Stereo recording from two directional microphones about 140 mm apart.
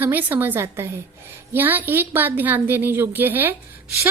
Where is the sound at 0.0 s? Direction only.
10° right (ahead or behind).